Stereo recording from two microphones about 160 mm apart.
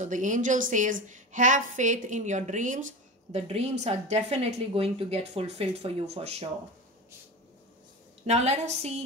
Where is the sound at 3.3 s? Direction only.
40° right (ahead or behind).